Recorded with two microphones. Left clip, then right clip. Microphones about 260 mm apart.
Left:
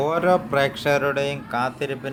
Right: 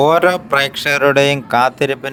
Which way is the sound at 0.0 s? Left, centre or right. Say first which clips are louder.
Right 8 dB; right.